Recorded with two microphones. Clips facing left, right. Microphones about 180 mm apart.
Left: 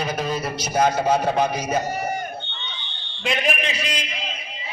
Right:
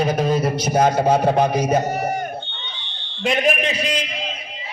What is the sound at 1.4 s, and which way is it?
Speech, 55° right (ahead or behind).